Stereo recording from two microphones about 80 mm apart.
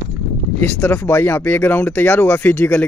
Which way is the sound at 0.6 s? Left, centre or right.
Left.